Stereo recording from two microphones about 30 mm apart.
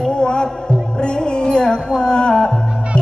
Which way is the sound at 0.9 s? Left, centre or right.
Left.